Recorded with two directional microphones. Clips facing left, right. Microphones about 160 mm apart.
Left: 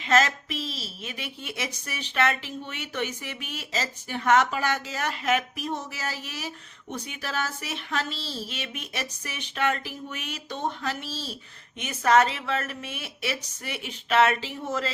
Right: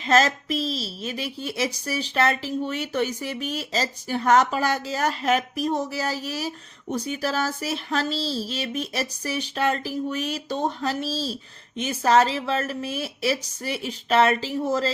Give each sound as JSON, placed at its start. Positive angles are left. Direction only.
{"t": 0.0, "sound": "a woman's voice", "side_deg": -35}